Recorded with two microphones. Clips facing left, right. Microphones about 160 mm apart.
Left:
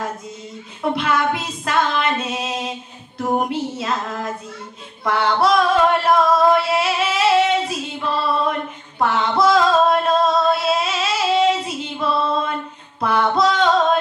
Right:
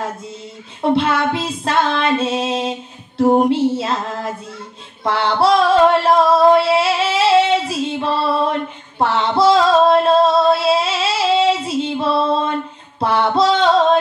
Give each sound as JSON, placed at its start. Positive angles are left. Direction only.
{"t": 0.9, "sound": "female singing", "side_deg": -30}
{"t": 5.0, "sound": "female singing", "side_deg": -30}
{"t": 13.0, "sound": "music", "side_deg": -30}